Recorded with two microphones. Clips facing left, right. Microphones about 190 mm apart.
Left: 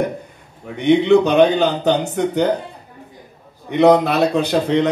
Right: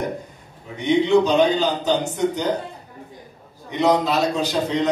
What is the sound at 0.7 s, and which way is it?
A man's voice, 60° left (ahead or behind).